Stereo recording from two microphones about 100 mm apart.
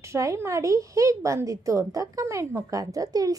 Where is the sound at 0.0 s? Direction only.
30° right (ahead or behind).